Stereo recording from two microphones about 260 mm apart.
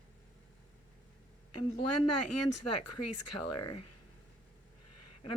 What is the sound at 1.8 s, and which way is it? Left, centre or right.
Speech, left.